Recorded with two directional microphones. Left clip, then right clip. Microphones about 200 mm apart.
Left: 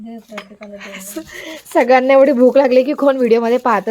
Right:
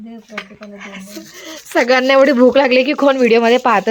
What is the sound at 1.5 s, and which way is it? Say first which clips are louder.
Speech: left 1 dB; 10° left (ahead or behind).